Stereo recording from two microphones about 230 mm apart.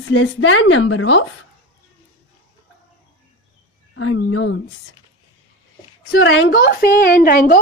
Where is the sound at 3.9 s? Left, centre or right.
Left.